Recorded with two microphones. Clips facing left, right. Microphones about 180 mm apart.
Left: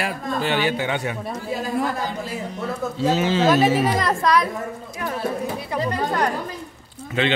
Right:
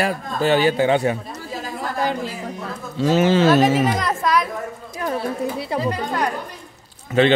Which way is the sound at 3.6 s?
Centre (ahead or behind).